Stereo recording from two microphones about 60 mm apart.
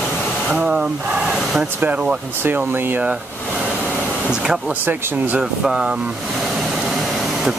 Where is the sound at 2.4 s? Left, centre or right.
Right.